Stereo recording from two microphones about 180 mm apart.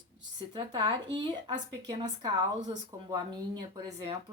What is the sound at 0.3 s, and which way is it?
Speech, 25° right (ahead or behind).